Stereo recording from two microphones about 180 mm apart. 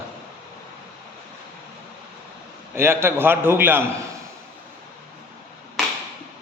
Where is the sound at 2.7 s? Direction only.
15° right (ahead or behind).